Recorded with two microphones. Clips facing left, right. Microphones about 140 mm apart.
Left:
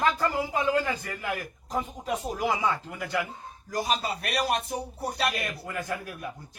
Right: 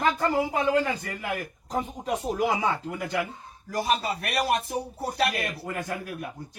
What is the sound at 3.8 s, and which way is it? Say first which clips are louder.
Speech: right 2 dB; 60° right (ahead or behind).